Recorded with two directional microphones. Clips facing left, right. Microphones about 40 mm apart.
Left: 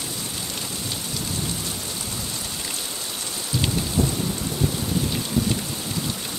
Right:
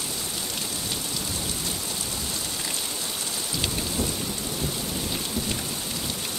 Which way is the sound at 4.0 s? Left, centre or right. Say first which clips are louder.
Left 7 dB; left.